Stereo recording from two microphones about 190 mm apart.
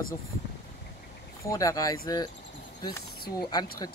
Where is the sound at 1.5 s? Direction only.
15° left (ahead or behind).